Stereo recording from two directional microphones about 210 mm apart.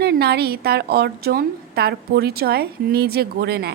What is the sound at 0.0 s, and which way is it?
A woman's voice, 50° right (ahead or behind).